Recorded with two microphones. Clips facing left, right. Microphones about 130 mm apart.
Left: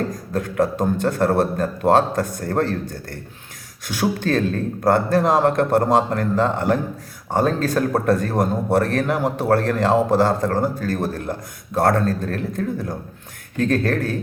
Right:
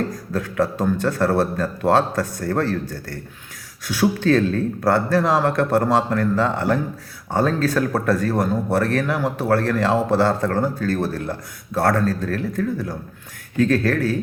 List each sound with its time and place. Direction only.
0.3 s speech: 20° left (ahead or behind)